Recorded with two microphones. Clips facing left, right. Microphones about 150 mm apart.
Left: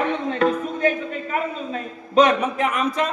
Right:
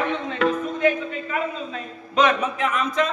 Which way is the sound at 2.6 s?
10° left (ahead or behind).